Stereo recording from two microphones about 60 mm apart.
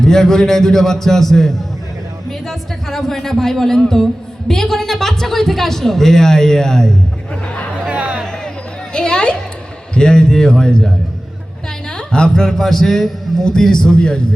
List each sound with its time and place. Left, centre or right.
0.0 s a man's voice: centre
7.9 s music: right
8.9 s a man's voice: centre